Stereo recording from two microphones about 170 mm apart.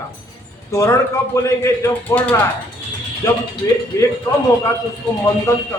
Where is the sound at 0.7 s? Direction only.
15° left (ahead or behind).